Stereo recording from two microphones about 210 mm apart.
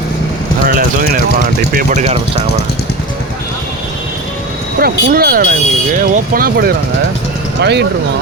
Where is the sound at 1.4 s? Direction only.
35° right (ahead or behind).